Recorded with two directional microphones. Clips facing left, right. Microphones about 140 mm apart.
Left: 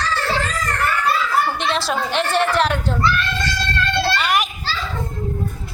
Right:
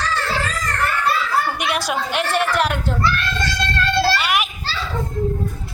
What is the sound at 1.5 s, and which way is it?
A woman's voice, 15° right (ahead or behind).